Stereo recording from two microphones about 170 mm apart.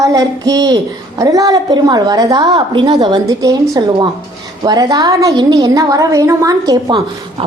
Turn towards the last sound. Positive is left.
turn(degrees=-25)  # may be behind; listen again after turning